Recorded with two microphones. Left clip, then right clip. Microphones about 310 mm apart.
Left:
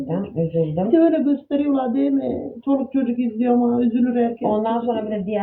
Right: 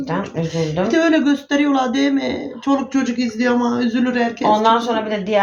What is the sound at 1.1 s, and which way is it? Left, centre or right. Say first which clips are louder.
Speech: right 4 dB; centre.